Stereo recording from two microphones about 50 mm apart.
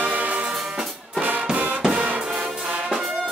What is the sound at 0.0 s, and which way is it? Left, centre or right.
Music, right.